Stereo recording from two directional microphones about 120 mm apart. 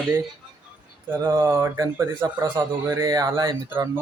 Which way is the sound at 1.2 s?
30° right (ahead or behind).